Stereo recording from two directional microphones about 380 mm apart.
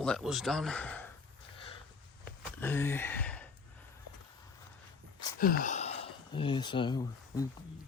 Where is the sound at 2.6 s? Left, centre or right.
Centre.